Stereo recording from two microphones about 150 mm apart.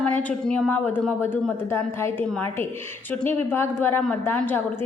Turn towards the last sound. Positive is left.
turn(degrees=15)  # may be behind; listen again after turning